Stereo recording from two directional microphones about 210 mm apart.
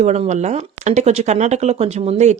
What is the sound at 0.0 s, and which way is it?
A woman's voice, 30° right (ahead or behind).